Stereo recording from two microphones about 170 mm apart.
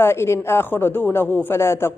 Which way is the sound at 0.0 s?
15° left (ahead or behind).